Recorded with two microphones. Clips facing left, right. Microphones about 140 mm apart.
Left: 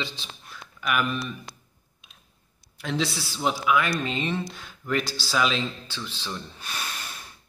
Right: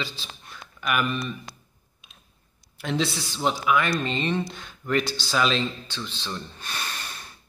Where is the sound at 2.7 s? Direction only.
Centre (ahead or behind).